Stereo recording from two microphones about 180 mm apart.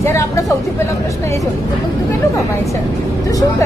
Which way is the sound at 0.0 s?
15° left (ahead or behind).